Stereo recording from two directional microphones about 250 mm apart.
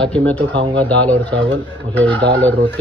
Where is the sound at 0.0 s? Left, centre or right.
Centre.